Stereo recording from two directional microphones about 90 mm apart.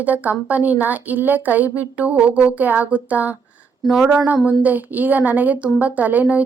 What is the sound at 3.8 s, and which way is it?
A woman's voice, 5° right (ahead or behind).